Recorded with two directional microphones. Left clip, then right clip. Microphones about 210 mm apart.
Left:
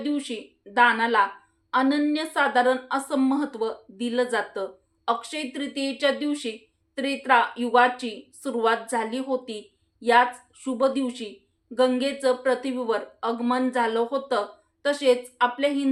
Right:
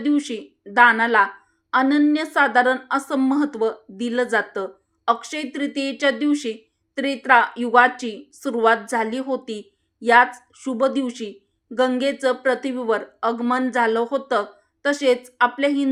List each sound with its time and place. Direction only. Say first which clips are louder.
0.0 s a woman's voice: right 7 dB; 35° right (ahead or behind)